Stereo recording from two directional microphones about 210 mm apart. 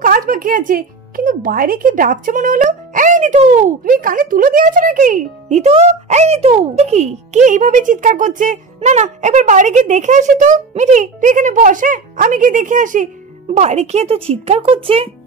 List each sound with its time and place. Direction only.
0.0 s speech: 40° right (ahead or behind); by 15.0 s 25° right (ahead or behind)